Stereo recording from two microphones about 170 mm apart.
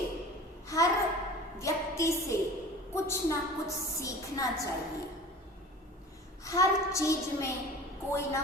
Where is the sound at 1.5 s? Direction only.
15° left (ahead or behind).